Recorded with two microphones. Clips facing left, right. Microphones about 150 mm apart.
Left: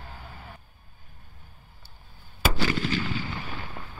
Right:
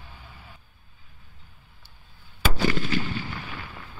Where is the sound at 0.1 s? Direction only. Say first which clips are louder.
Left 4 dB; 50° left (ahead or behind).